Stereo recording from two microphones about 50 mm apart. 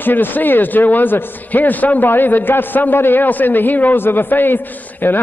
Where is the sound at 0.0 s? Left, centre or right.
Left.